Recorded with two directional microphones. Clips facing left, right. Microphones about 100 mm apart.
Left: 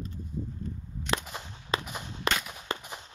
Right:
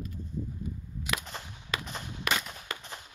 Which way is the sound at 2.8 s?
15° left (ahead or behind).